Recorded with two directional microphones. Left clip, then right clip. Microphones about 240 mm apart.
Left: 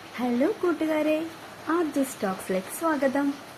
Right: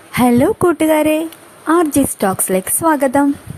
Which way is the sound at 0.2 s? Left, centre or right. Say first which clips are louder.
Right 13 dB; right.